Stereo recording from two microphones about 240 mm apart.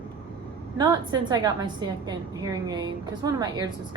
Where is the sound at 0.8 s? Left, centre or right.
Centre.